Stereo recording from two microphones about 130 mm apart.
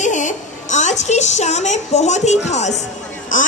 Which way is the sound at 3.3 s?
80° left.